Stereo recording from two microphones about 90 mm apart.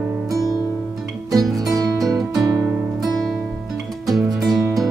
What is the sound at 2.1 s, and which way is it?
Music, 40° right (ahead or behind).